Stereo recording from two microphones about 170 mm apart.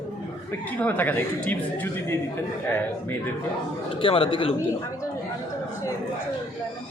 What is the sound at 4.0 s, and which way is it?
Speech, 30° left (ahead or behind).